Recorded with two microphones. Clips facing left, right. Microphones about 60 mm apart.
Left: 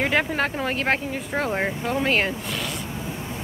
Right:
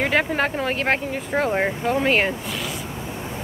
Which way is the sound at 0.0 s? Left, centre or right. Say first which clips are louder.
Right 2 dB; centre.